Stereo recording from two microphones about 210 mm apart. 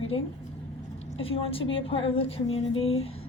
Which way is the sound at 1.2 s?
25° left (ahead or behind).